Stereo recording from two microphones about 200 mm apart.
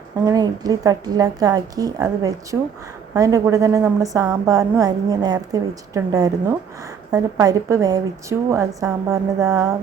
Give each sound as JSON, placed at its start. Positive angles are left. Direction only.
{"t": 0.3, "sound": "a woman's voice", "side_deg": -20}